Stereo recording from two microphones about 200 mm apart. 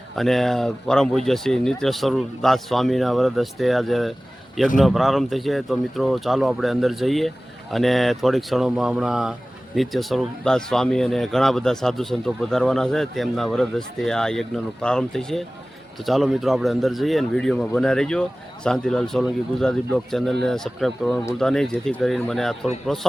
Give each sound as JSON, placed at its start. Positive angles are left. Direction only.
{"t": 0.2, "sound": "speech", "side_deg": 0}